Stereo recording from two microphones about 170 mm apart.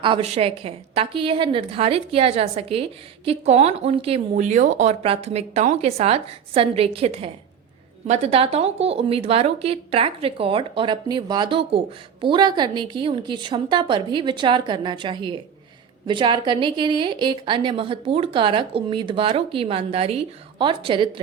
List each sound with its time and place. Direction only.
0.0 s a woman's voice: 35° right (ahead or behind)